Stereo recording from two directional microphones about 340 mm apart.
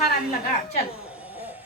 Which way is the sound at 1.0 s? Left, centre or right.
Centre.